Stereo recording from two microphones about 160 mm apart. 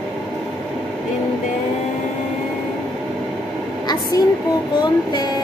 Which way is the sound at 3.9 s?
25° left (ahead or behind).